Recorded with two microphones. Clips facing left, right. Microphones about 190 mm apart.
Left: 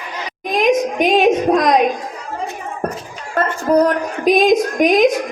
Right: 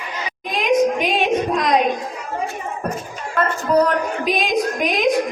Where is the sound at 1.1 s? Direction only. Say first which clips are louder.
Left 6 dB; 45° left (ahead or behind).